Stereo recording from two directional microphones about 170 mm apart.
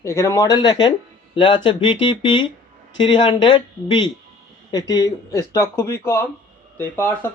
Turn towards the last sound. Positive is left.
turn(degrees=10)  # may be behind; listen again after turning